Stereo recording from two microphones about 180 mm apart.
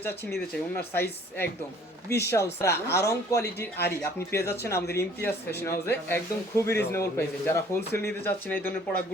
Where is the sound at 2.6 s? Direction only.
15° left (ahead or behind).